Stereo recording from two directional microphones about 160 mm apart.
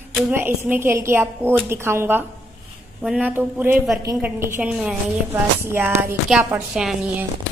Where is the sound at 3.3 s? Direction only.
15° right (ahead or behind).